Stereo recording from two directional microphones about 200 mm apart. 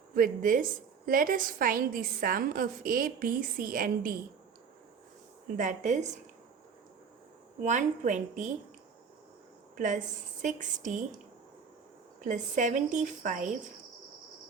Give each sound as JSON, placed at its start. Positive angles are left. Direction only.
{"t": 0.1, "sound": "a woman's voice", "side_deg": -45}
{"t": 5.5, "sound": "a woman's voice", "side_deg": -40}
{"t": 7.6, "sound": "a woman's voice", "side_deg": -35}
{"t": 9.7, "sound": "a woman's voice", "side_deg": -40}
{"t": 12.2, "sound": "a woman's voice", "side_deg": -40}